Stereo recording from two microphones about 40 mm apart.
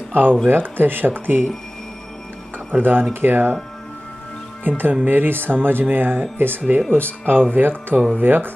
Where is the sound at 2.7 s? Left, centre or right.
Right.